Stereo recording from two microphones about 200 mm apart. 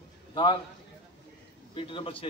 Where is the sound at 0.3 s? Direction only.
25° left (ahead or behind).